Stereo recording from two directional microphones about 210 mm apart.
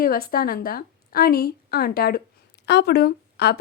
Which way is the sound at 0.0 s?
45° left (ahead or behind).